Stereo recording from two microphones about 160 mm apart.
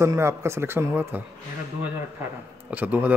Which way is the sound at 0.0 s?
15° right (ahead or behind).